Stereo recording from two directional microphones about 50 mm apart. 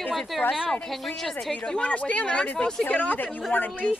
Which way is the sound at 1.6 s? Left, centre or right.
Left.